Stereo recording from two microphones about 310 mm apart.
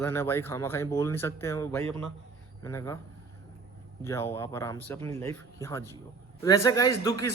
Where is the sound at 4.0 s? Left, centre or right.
Centre.